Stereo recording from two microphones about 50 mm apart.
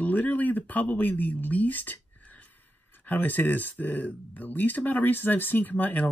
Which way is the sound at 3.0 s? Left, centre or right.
Left.